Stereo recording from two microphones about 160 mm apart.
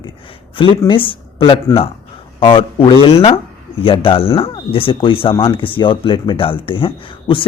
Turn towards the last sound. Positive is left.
turn(degrees=30)  # may be behind; listen again after turning